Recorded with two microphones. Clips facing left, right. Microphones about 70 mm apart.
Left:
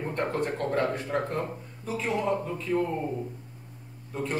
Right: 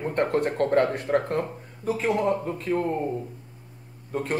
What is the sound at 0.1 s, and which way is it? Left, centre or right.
A man's voice, right.